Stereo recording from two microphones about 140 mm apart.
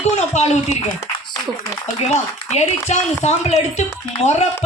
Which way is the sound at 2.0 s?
55° left (ahead or behind).